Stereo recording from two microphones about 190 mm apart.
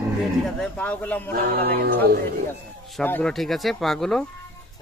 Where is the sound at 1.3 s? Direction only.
55° right (ahead or behind).